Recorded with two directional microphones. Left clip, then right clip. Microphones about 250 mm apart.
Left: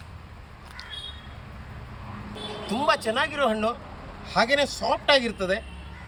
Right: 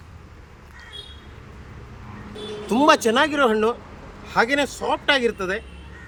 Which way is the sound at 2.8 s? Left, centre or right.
Right.